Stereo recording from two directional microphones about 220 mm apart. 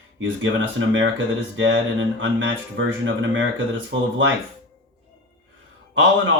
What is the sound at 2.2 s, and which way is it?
Speech, 60° right (ahead or behind).